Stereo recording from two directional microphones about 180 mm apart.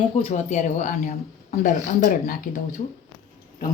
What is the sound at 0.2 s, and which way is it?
Speech, 35° left (ahead or behind).